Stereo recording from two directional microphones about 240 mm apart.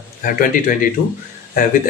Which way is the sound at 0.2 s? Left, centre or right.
Left.